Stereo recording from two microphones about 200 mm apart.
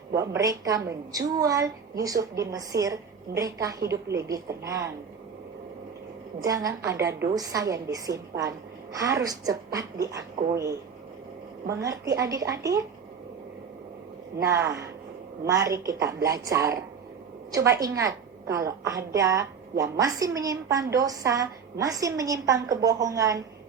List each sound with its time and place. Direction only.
0.1 s a woman's voice: 15° right (ahead or behind)
6.4 s a woman's voice: 15° right (ahead or behind)
14.5 s a woman's voice: 15° right (ahead or behind)